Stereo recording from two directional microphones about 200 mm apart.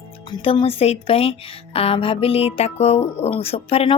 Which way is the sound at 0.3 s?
25° left (ahead or behind).